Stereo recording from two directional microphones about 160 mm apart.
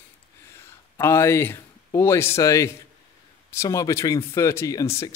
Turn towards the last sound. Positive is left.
turn(degrees=20)  # may be behind; listen again after turning